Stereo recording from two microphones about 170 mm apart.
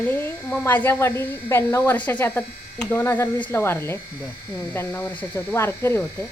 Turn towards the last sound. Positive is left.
turn(degrees=15)  # may be behind; listen again after turning